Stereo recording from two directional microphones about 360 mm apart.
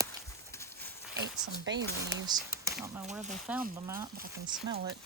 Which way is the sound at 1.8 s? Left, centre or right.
Centre.